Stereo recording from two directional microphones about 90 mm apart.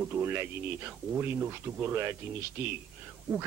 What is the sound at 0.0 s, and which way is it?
A woman's voice, 25° right (ahead or behind).